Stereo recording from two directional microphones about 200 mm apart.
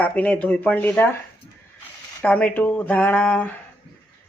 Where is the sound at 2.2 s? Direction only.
5° left (ahead or behind).